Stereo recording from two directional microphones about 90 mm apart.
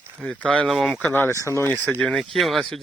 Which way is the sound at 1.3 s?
35° left (ahead or behind).